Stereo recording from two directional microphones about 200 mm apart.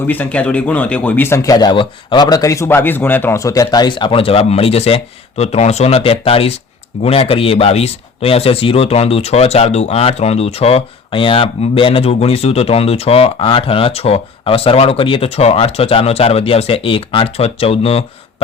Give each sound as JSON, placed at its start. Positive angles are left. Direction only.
{"t": 0.1, "sound": "speech", "side_deg": 10}